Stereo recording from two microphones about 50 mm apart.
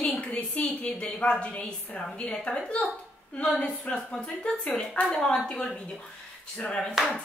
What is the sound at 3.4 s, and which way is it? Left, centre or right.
A woman's voice, left.